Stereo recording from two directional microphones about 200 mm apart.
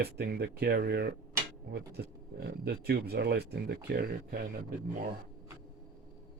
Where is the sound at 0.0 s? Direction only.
55° right (ahead or behind).